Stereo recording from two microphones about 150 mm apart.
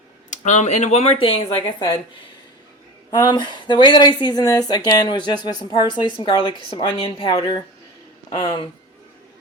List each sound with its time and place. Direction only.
0.3 s speech: 55° left (ahead or behind)
1.5 s a woman's voice: 30° left (ahead or behind)
3.1 s a woman's voice: 30° left (ahead or behind)